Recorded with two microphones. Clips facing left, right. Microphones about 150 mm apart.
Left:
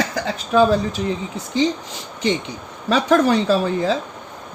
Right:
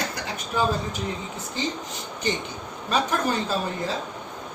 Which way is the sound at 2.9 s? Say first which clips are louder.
Left 9 dB; 90° left.